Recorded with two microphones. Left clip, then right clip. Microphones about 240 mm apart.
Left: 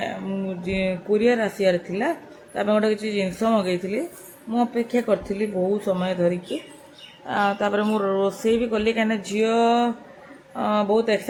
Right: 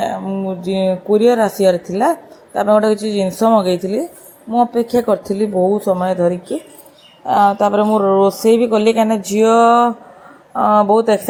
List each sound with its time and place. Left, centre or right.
0.4 s speech: centre
6.0 s speech: centre
7.3 s speech: centre